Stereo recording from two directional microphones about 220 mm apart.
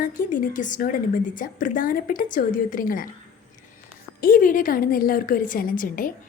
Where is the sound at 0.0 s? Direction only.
35° left (ahead or behind).